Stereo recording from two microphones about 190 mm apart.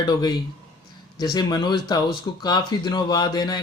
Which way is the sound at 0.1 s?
20° left (ahead or behind).